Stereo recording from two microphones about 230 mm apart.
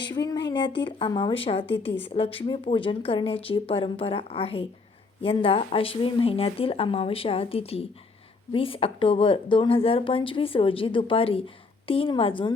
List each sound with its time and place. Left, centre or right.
0.3 s speech: centre